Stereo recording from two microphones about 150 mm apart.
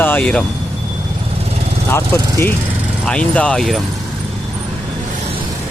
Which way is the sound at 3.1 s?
5° left (ahead or behind).